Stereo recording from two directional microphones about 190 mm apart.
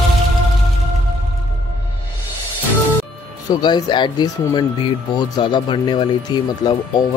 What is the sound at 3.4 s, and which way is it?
Speech, 20° left (ahead or behind).